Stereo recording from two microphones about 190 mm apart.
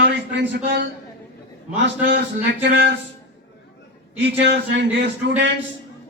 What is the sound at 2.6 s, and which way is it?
Speech, 65° right (ahead or behind).